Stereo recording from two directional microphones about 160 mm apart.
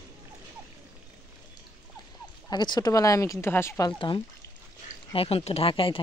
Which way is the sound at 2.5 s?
25° left (ahead or behind).